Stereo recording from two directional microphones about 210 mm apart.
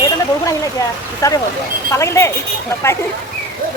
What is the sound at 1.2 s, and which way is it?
Speech, 15° left (ahead or behind).